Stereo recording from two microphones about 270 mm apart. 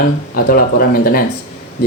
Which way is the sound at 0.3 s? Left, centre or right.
Left.